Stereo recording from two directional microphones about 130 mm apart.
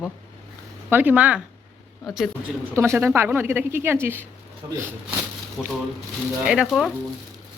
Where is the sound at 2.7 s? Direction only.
20° right (ahead or behind).